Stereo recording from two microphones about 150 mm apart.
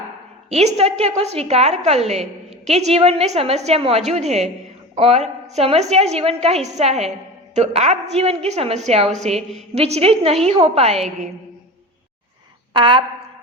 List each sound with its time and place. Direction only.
0.5 s a woman's voice: 45° right (ahead or behind)
12.7 s a woman's voice: 35° right (ahead or behind)